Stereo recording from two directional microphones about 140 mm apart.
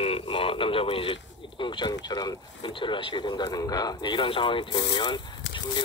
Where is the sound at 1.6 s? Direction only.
30° left (ahead or behind).